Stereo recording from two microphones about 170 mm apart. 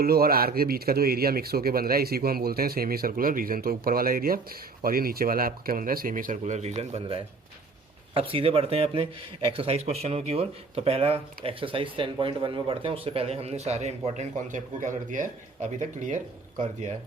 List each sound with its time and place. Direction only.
0.0 s a man's voice: 65° right (ahead or behind); by 16.9 s 45° right (ahead or behind)